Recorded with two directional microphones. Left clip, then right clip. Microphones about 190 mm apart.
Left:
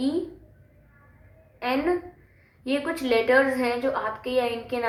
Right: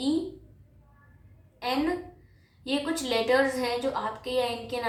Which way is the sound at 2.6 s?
35° left (ahead or behind).